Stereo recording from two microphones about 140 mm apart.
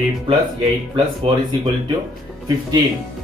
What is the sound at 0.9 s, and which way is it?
Speech, 40° right (ahead or behind).